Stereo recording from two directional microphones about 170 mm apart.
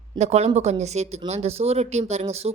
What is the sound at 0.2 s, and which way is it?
Speech, 40° right (ahead or behind).